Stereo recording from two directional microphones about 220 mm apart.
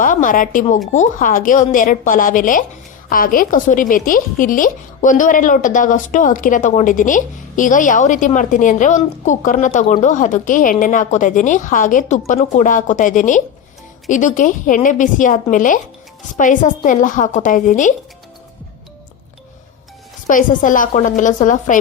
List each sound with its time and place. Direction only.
0.0 s a woman's voice: 35° left (ahead or behind)
20.2 s a woman's voice: 35° left (ahead or behind)